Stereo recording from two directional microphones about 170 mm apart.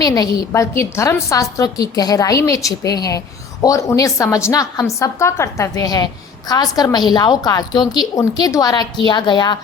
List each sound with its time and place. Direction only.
0.0 s a woman's voice: 20° left (ahead or behind)